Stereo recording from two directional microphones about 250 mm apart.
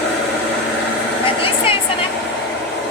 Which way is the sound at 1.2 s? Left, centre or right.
Left.